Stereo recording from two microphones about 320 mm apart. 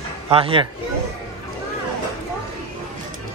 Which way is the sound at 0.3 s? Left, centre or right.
Centre.